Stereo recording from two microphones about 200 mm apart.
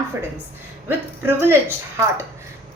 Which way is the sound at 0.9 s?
10° right (ahead or behind).